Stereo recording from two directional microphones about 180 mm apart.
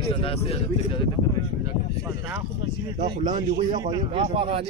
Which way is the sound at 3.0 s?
25° right (ahead or behind).